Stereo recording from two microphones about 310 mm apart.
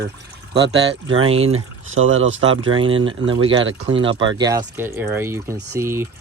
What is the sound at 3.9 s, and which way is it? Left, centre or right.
Speech, centre.